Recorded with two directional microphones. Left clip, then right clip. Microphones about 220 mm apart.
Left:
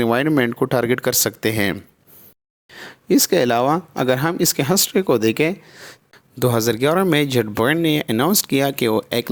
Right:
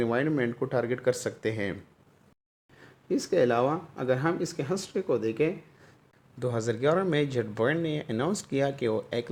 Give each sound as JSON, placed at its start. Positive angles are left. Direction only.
{"t": 0.0, "sound": "speech", "side_deg": 40}